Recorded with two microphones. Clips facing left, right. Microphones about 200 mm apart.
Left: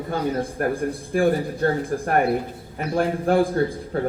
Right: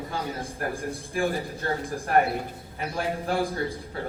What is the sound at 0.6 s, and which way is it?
A man's voice, 55° left (ahead or behind).